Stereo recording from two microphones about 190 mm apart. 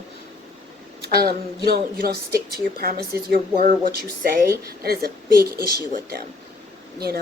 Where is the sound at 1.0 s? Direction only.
55° right (ahead or behind).